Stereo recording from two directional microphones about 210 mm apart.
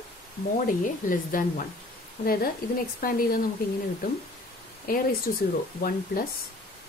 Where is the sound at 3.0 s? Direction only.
45° left (ahead or behind).